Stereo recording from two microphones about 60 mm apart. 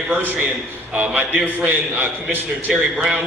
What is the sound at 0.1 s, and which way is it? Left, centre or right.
A man's voice, right.